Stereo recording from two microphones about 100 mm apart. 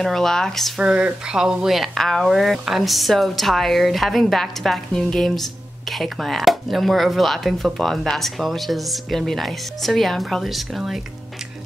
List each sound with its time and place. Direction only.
0.0 s speech: 5° left (ahead or behind)
0.7 s speech: 10° right (ahead or behind)